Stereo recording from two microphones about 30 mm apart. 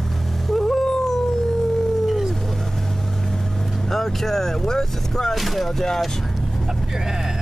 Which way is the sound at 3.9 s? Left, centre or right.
Centre.